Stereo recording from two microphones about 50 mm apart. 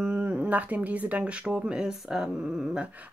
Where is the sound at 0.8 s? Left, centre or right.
Right.